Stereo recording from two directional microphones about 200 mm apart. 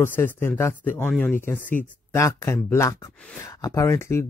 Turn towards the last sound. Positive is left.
turn(degrees=15)  # may be behind; listen again after turning